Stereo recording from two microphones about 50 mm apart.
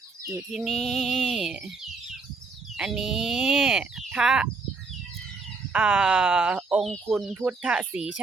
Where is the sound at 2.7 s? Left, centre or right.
Centre.